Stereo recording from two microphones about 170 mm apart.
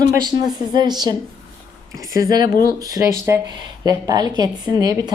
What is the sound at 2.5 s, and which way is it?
Speech, 60° left (ahead or behind).